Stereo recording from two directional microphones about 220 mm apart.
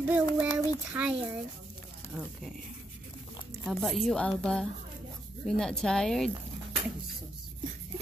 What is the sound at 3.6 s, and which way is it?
A woman's voice, centre (ahead or behind).